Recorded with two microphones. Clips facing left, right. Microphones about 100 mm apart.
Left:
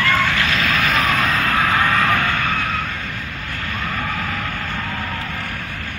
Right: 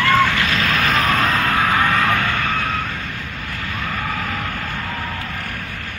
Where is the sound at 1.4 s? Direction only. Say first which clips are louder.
Even; 20° right (ahead or behind).